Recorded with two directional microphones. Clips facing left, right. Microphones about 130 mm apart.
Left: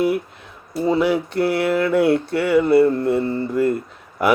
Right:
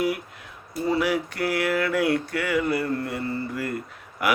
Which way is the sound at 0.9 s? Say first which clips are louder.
Left 5 dB; 25° left (ahead or behind).